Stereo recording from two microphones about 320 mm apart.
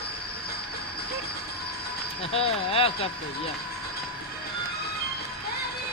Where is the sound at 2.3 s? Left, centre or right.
Centre.